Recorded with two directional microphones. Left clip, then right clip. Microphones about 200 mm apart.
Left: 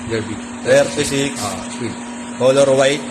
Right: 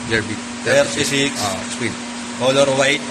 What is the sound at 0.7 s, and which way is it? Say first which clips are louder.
Speech: left 2 dB; 50° left (ahead or behind).